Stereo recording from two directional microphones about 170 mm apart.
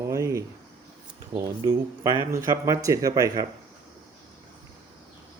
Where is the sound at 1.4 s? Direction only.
20° right (ahead or behind).